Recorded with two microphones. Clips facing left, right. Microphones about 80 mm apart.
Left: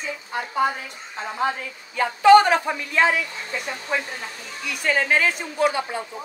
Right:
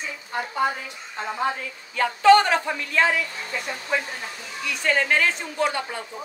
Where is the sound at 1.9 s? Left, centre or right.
Centre.